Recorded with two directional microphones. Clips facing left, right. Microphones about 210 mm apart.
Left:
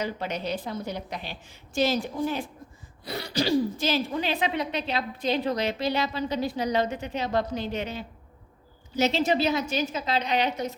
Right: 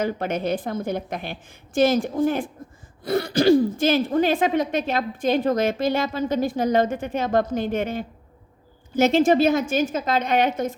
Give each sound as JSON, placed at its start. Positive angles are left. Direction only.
{"t": 0.0, "sound": "speech", "side_deg": -50}